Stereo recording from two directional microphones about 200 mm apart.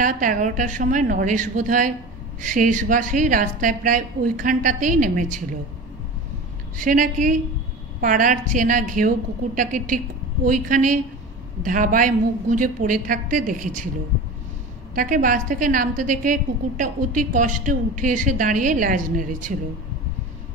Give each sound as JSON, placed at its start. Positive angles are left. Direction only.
{"t": 0.0, "sound": "a woman's voice", "side_deg": -40}
{"t": 6.8, "sound": "a woman's voice", "side_deg": -40}
{"t": 15.0, "sound": "a woman's voice", "side_deg": -45}